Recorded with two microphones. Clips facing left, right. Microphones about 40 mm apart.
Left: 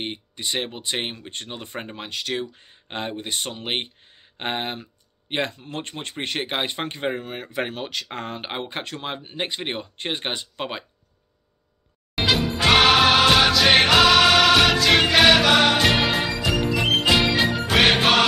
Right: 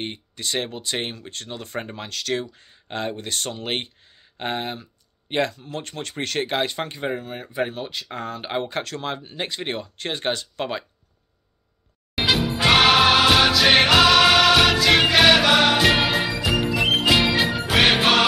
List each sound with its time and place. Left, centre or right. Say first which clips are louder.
0.0 s speech: even; left
8.4 s speech: right 4 dB; left
12.2 s music: even; centre